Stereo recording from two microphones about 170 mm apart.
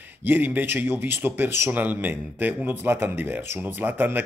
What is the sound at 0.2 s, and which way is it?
Speech, 10° right (ahead or behind).